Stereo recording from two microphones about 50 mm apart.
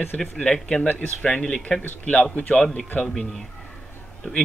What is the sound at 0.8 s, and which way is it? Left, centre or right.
Speech, left.